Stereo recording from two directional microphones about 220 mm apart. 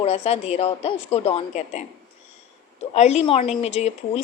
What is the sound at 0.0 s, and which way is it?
A woman's voice, 30° left (ahead or behind).